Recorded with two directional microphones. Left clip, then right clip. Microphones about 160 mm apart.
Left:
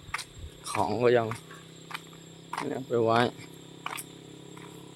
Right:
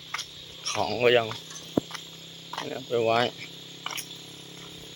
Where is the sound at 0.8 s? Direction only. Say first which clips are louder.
Right 2 dB; 25° left (ahead or behind).